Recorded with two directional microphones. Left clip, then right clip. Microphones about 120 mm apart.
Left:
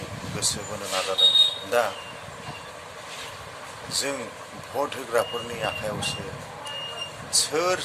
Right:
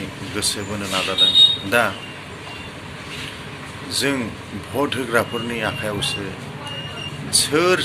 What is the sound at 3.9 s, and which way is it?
Speech, 15° left (ahead or behind).